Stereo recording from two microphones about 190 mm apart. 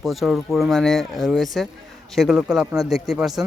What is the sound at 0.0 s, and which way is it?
Speech, centre (ahead or behind).